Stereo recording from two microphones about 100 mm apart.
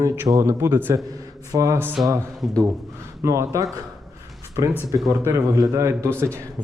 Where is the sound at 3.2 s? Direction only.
30° right (ahead or behind).